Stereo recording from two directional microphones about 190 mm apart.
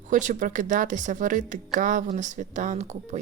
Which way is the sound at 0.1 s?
45° right (ahead or behind).